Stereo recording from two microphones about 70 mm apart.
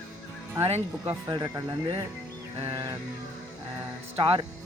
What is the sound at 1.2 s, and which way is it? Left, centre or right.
Speech, right.